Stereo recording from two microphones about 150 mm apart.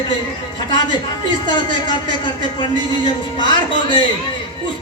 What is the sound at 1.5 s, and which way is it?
Speech, 30° left (ahead or behind).